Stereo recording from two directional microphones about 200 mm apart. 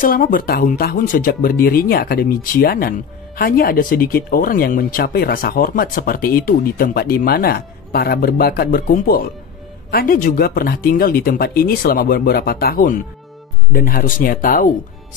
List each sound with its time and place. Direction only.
0.0 s speech: 45° left (ahead or behind)